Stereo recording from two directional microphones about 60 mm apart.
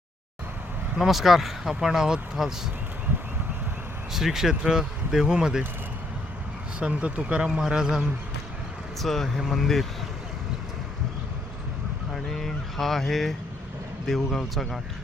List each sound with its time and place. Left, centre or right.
0.9 s speech: centre
4.1 s speech: centre
6.7 s speech: centre
9.0 s speech: centre
12.1 s vehicle: centre
14.1 s speech: centre